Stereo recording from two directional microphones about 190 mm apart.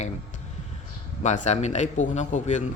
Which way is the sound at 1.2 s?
40° left (ahead or behind).